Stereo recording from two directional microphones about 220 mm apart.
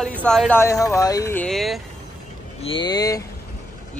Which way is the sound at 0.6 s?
15° left (ahead or behind).